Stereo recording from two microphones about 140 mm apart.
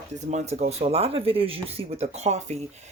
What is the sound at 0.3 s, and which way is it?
Speech, 55° right (ahead or behind).